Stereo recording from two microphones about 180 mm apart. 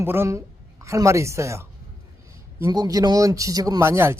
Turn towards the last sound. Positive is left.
turn(degrees=-15)  # may be behind; listen again after turning